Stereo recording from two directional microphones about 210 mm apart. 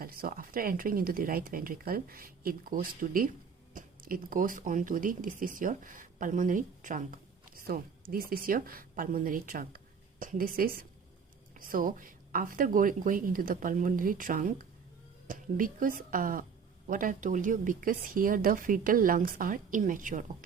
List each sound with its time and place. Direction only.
0.0 s a woman's voice: 45° right (ahead or behind)